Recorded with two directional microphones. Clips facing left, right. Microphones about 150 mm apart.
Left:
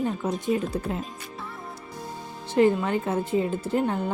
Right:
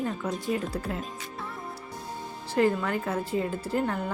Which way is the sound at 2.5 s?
20° left (ahead or behind).